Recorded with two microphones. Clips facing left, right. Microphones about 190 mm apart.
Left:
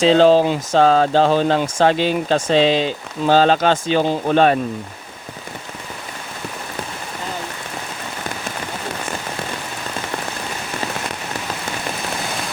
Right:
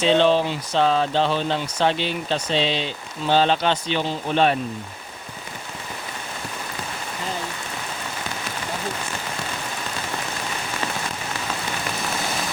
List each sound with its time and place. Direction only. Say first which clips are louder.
0.2 s speech: left 6 dB; 40° left (ahead or behind)